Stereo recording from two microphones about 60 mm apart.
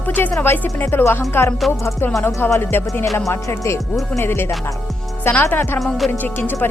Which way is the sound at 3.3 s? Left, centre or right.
Left.